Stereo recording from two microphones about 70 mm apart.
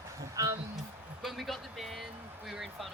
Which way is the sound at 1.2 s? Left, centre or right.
Centre.